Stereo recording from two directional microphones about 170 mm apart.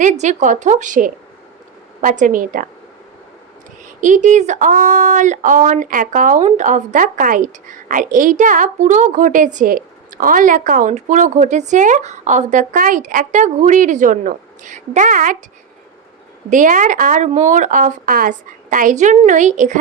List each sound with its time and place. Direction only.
0.0 s speech: 45° right (ahead or behind)
4.0 s speech: 45° right (ahead or behind)
16.5 s speech: 50° right (ahead or behind)